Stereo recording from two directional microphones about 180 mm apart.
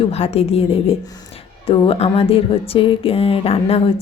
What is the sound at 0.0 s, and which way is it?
Speech, 35° left (ahead or behind).